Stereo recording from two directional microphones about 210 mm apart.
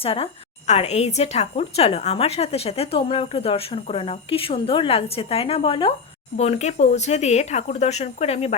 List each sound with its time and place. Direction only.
0.0 s a woman's voice: 25° left (ahead or behind)